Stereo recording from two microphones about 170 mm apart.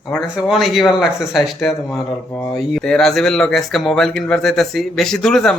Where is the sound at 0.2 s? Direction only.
Centre (ahead or behind).